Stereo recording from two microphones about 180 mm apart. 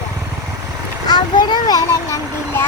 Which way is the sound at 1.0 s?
25° left (ahead or behind).